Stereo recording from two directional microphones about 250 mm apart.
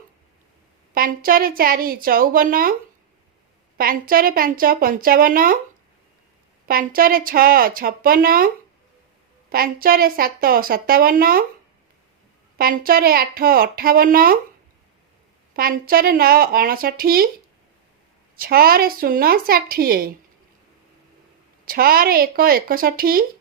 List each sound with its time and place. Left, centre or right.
0.9 s a woman's voice: right
3.8 s a woman's voice: right
6.7 s a woman's voice: right
9.5 s a woman's voice: right
12.5 s a woman's voice: right
15.5 s a woman's voice: right
18.3 s a woman's voice: right
21.6 s a woman's voice: right